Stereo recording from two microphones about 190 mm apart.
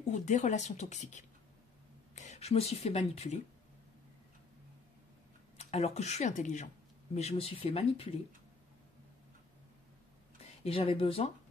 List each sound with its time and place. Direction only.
0.0 s speech: 40° left (ahead or behind)
5.6 s speech: 35° left (ahead or behind)
10.6 s speech: 30° left (ahead or behind)